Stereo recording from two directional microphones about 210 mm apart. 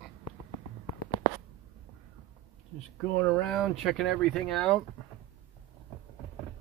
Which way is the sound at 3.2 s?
5° left (ahead or behind).